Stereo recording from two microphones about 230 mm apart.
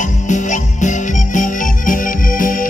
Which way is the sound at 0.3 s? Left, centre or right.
Left.